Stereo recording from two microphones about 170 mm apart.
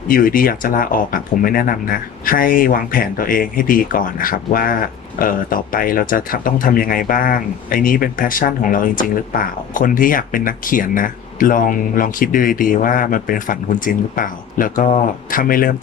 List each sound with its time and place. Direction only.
0.1 s speech: 55° left (ahead or behind)